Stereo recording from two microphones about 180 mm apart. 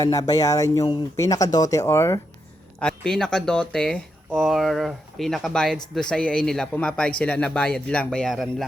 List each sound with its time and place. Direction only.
0.0 s speech: 20° left (ahead or behind)
2.7 s speech: 5° left (ahead or behind)